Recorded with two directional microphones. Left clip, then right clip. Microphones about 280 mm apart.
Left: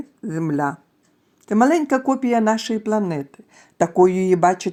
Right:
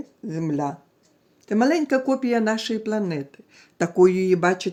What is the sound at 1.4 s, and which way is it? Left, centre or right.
Speech, centre.